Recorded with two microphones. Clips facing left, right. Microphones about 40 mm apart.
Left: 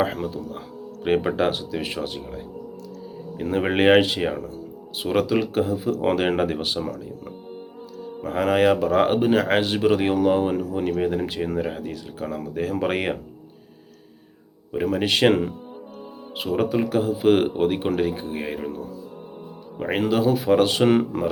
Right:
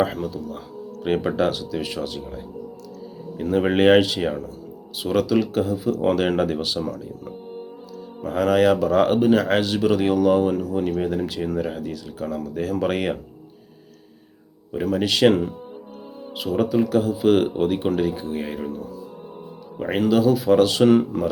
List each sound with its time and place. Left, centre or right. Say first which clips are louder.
0.0 s speech: right 1 dB; left
1.0 s speech: even; left
8.2 s speech: right 1 dB; left
11.2 s speech: even; left
14.8 s speech: right 1 dB; left
15.3 s speech: even; left
20.1 s speech: right 3 dB; left
20.9 s speech: right 2 dB; left